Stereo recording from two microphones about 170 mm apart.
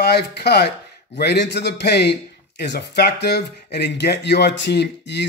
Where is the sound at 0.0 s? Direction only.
70° left (ahead or behind).